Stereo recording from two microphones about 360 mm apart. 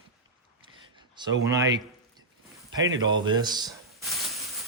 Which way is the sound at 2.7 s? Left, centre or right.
Centre.